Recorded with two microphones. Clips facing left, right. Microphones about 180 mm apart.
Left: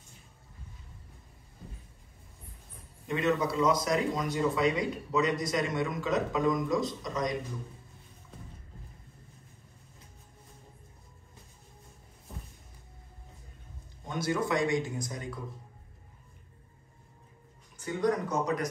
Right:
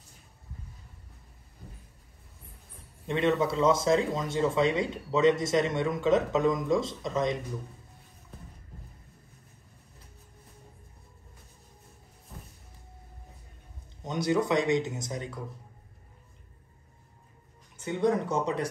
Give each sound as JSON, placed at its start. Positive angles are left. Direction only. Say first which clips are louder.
{"t": 3.1, "sound": "speech", "louder": "right 3 dB", "side_deg": -25}
{"t": 14.0, "sound": "speech", "louder": "right 4 dB", "side_deg": -20}
{"t": 17.7, "sound": "speech", "louder": "right 2 dB", "side_deg": -25}